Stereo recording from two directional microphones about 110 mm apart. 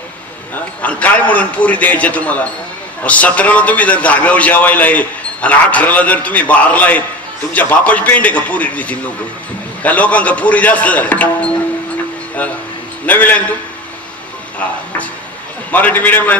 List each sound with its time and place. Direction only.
0.8 s a man's voice: 15° left (ahead or behind)
14.6 s music: 15° left (ahead or behind)
15.7 s a man's voice: 15° left (ahead or behind)